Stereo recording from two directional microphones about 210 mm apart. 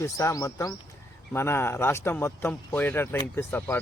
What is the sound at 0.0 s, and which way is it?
A man's voice, 15° left (ahead or behind).